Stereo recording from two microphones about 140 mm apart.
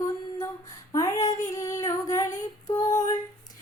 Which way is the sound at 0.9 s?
25° left (ahead or behind).